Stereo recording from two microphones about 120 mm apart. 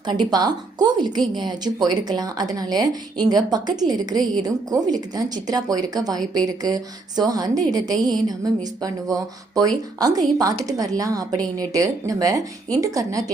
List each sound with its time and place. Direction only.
0.0 s speech: 35° right (ahead or behind)